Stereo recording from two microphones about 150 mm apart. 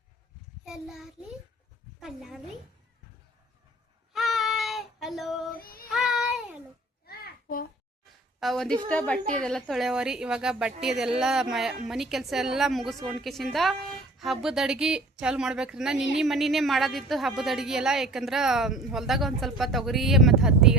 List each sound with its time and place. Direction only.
0.6 s child singing: centre (ahead or behind)
2.0 s a woman's voice: centre (ahead or behind)
4.1 s child singing: centre (ahead or behind)
5.6 s child singing: 75° left (ahead or behind)
5.9 s child singing: centre (ahead or behind)
7.1 s a sound: 85° left
8.4 s a woman's voice: centre (ahead or behind)